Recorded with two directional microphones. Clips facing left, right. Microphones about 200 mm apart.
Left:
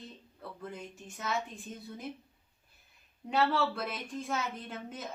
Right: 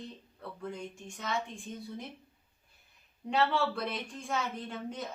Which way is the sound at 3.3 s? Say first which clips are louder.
Even; centre (ahead or behind).